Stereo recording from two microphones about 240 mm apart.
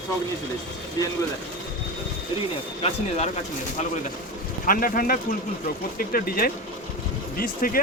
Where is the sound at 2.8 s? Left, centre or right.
Left.